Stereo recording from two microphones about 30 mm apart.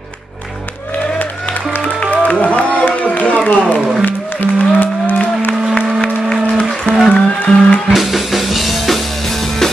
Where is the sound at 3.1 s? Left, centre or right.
Left.